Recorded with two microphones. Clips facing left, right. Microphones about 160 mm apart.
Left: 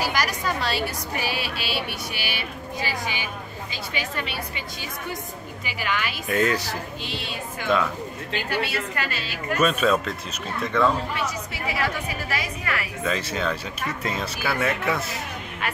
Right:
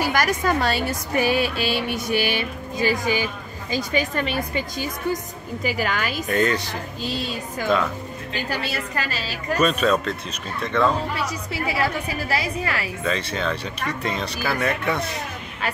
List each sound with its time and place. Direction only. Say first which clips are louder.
0.0 s a woman's voice: right 4 dB; 50° right (ahead or behind)
6.2 s speech: right 1 dB; 5° left (ahead or behind)
7.1 s a woman's voice: right 6 dB; 40° right (ahead or behind)
8.5 s a woman's voice: left 2 dB; 35° right (ahead or behind)
9.6 s speech: right 1 dB; 5° left (ahead or behind)
11.1 s a woman's voice: right 2 dB; 35° right (ahead or behind)
13.0 s speech: right 1 dB; 5° left (ahead or behind)